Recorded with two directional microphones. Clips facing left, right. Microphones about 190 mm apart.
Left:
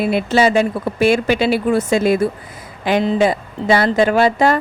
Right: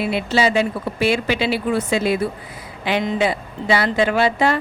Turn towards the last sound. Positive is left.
turn(degrees=45)  # may be behind; listen again after turning